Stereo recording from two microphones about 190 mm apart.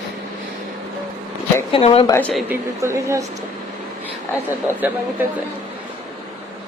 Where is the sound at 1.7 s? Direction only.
30° left (ahead or behind).